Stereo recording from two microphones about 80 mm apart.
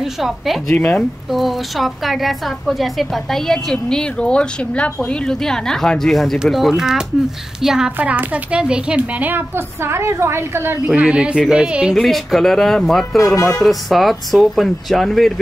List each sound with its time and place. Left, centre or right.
0.0 s a woman's voice: centre
0.7 s speech: centre
1.3 s a woman's voice: centre
8.0 s speech: centre
9.8 s a woman's voice: right
10.9 s speech: centre
11.9 s a woman's voice: centre